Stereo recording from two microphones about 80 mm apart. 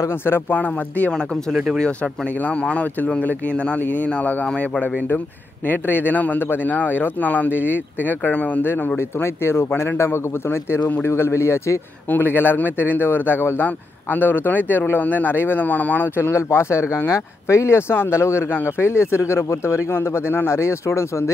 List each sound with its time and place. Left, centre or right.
0.2 s speech: left
2.4 s speech: centre
8.6 s speech: left
16.2 s speech: left